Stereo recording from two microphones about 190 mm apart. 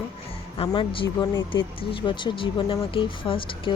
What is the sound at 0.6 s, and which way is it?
Speech, 25° left (ahead or behind).